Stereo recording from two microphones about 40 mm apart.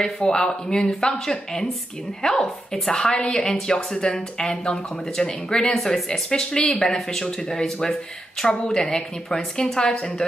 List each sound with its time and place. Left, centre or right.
0.0 s a woman's voice: centre